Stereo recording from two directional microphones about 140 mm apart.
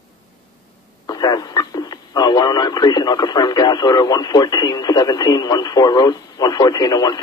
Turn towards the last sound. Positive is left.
turn(degrees=25)  # may be behind; listen again after turning